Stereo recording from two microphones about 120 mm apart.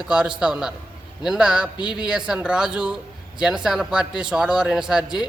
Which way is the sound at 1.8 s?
40° left (ahead or behind).